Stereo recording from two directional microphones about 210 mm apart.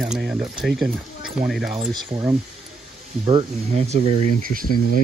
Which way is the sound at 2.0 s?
20° right (ahead or behind).